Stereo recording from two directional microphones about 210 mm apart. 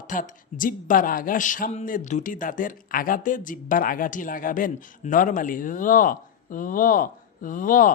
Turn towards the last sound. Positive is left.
turn(degrees=40)  # may be behind; listen again after turning